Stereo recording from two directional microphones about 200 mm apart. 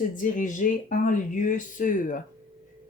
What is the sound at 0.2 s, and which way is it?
Speech, 40° left (ahead or behind).